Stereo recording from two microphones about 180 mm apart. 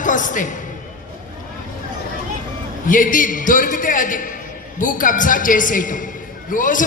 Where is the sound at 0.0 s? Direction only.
45° left (ahead or behind).